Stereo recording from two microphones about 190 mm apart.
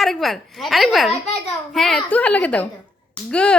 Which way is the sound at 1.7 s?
Centre (ahead or behind).